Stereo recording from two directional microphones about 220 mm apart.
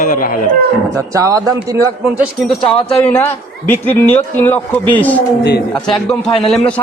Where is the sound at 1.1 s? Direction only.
15° right (ahead or behind).